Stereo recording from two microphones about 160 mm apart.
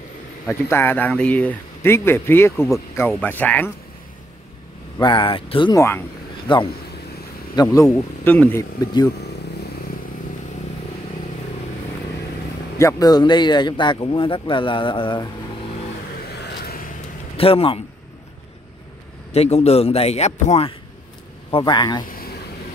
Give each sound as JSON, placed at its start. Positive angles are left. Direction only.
{"t": 0.5, "sound": "speech", "side_deg": 15}
{"t": 4.9, "sound": "speech", "side_deg": 30}
{"t": 5.8, "sound": "speech", "side_deg": 15}
{"t": 6.4, "sound": "speech", "side_deg": 30}
{"t": 7.8, "sound": "speech", "side_deg": 10}
{"t": 12.7, "sound": "speech", "side_deg": 20}
{"t": 16.3, "sound": "vehicle", "side_deg": 85}
{"t": 17.4, "sound": "speech", "side_deg": 35}
{"t": 19.3, "sound": "speech", "side_deg": 40}
{"t": 21.5, "sound": "speech", "side_deg": 30}